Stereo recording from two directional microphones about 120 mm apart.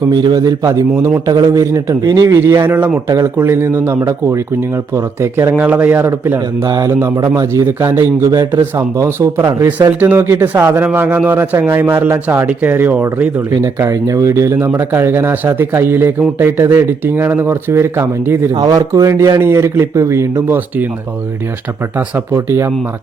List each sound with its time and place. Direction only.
0.1 s speech: 35° right (ahead or behind); by 6.4 s 20° right (ahead or behind)
6.7 s speech: 35° right (ahead or behind)
7.0 s speech: 25° right (ahead or behind)
8.2 s speech: 30° right (ahead or behind)
9.6 s speech: 15° right (ahead or behind)
13.5 s speech: 30° right (ahead or behind)
18.5 s speech: 30° right (ahead or behind)
22.3 s speech: 20° right (ahead or behind)